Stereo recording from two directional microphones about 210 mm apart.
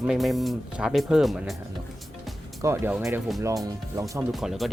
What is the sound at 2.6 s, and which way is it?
Speech, 10° right (ahead or behind).